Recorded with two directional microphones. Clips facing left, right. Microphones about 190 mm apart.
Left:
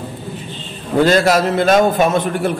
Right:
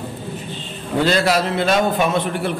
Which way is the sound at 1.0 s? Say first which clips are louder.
Left 4 dB; 45° left (ahead or behind).